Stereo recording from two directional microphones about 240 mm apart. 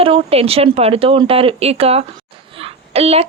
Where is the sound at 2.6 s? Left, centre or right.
Right.